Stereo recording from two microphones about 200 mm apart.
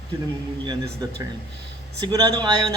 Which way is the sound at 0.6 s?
15° right (ahead or behind).